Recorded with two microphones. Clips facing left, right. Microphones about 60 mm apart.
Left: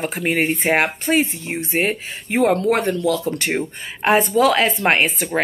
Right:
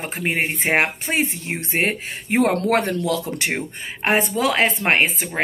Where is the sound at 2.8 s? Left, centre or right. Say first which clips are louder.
Left 1 dB; right.